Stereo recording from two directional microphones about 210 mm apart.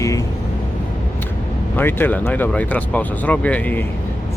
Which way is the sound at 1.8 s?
10° left (ahead or behind).